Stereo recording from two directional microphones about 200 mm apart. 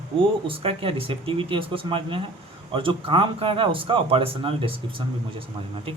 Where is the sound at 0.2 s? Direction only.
25° right (ahead or behind).